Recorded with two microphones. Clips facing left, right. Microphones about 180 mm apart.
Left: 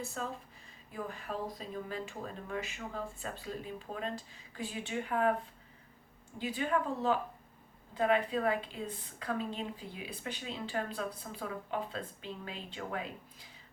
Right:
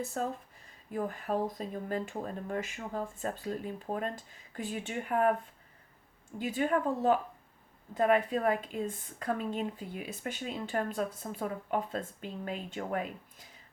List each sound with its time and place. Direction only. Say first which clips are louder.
0.1 s a woman's voice: right 5 dB; 45° right (ahead or behind)
6.4 s a woman's voice: right 3 dB; 45° right (ahead or behind)